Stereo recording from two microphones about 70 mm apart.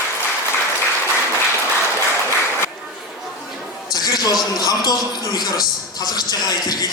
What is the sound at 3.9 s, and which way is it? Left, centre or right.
A man's voice, left.